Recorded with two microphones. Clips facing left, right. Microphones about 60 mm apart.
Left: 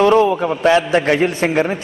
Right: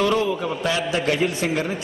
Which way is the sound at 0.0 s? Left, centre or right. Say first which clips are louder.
Left 8 dB; left.